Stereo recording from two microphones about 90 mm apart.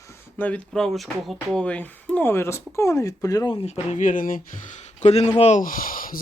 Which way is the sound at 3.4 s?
70° left (ahead or behind).